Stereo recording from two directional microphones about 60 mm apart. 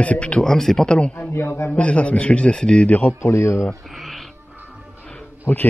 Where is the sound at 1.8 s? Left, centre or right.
Left.